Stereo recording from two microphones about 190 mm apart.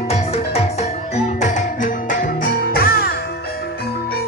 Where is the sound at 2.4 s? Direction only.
50° left (ahead or behind).